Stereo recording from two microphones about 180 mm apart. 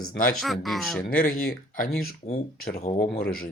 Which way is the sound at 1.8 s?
40° left (ahead or behind).